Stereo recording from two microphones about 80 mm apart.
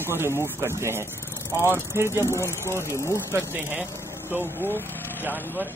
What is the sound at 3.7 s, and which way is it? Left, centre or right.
Speech, right.